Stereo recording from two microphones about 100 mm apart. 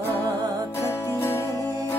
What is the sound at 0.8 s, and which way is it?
Music, 25° left (ahead or behind).